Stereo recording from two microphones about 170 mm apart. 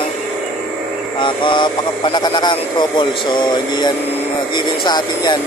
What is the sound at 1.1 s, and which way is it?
Speech, 30° left (ahead or behind).